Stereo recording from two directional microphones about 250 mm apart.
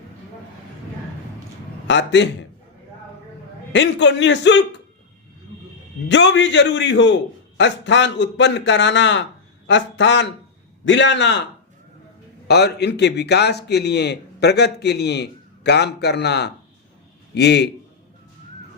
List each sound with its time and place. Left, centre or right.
1.9 s a man's voice: left
3.7 s a man's voice: left
6.1 s a man's voice: left
12.5 s a man's voice: left